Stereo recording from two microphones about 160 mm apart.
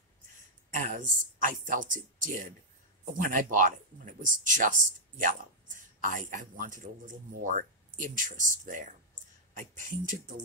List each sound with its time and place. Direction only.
0.7 s speech: 55° right (ahead or behind)